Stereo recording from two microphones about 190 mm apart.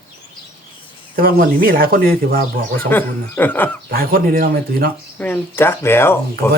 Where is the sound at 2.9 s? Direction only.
10° left (ahead or behind).